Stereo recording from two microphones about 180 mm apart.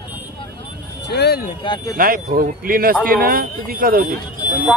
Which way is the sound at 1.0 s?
65° left (ahead or behind).